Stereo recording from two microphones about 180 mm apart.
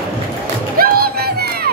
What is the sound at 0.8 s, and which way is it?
Crowd, 55° right (ahead or behind).